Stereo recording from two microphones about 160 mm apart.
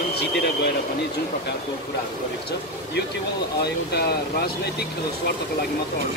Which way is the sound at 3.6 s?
85° left.